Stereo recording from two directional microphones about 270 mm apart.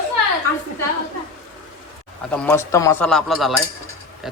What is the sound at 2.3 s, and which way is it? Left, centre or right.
A man's voice, centre.